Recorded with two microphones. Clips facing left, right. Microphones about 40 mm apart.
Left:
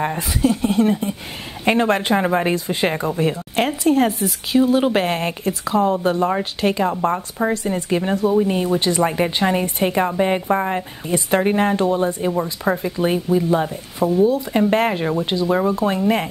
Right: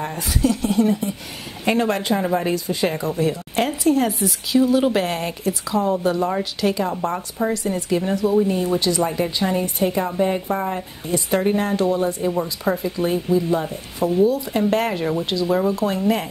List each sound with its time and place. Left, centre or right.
0.4 s speech: left
0.7 s speech: left
7.5 s speech: left